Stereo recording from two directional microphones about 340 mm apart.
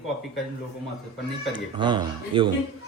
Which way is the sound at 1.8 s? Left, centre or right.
Centre.